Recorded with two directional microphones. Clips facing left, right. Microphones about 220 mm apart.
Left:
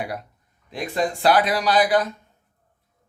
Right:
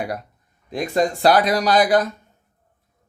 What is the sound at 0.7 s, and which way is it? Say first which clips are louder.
Speech: right 4 dB; 40° right (ahead or behind).